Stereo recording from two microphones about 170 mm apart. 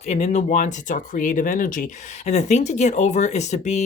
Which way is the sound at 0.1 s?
40° left (ahead or behind).